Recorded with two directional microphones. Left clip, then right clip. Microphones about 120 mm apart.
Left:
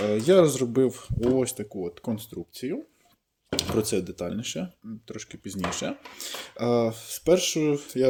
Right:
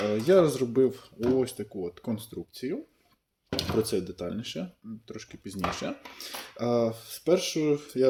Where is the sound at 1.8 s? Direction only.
35° left (ahead or behind).